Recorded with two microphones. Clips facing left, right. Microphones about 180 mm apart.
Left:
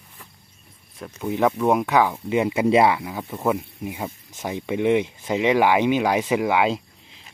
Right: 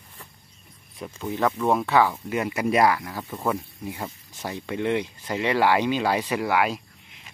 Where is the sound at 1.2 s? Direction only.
15° left (ahead or behind).